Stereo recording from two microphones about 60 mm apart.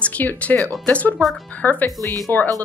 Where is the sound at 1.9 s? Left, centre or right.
Right.